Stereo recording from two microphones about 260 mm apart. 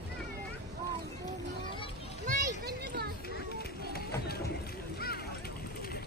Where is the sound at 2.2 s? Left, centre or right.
Right.